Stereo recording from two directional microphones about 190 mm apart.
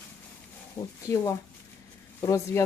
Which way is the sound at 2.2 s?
15° left (ahead or behind).